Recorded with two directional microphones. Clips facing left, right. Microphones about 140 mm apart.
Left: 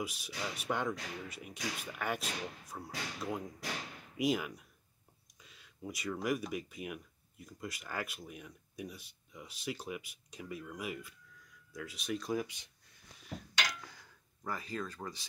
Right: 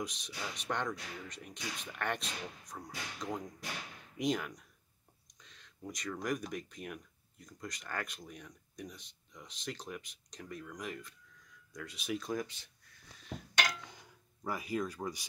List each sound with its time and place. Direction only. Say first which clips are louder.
0.0 s speech: left 1 dB; 5° left (ahead or behind)
14.4 s speech: right 4 dB; 10° right (ahead or behind)